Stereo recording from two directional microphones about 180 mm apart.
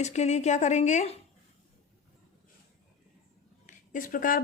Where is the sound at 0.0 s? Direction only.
40° left (ahead or behind).